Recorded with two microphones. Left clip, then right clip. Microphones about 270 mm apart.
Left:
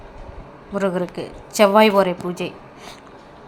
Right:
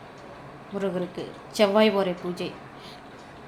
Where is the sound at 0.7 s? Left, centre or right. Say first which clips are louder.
Left 7 dB; centre.